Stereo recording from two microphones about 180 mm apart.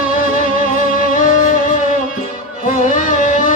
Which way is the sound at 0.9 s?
45° left (ahead or behind).